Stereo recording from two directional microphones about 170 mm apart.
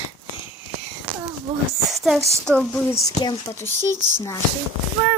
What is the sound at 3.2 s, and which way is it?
A child's voice, 20° left (ahead or behind).